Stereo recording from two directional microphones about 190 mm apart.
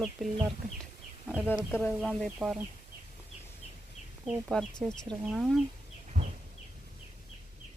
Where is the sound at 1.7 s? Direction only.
5° left (ahead or behind).